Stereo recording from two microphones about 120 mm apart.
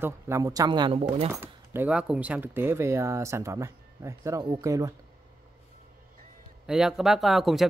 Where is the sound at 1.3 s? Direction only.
20° right (ahead or behind).